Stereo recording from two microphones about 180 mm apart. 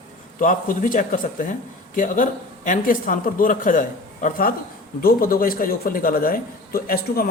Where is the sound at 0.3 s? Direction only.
50° left (ahead or behind).